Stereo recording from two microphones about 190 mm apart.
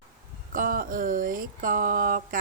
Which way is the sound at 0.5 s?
45° right (ahead or behind).